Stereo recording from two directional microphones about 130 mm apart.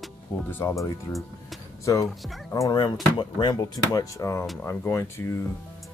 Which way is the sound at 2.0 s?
Centre (ahead or behind).